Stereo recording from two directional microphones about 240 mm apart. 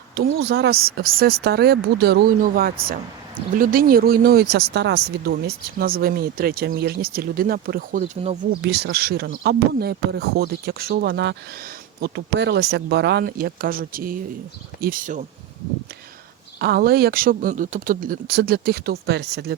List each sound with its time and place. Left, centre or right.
0.1 s speech: right
8.6 s speech: right
16.6 s speech: right